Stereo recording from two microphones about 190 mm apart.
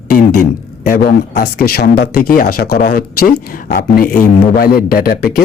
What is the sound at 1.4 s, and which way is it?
Speech, 55° left (ahead or behind).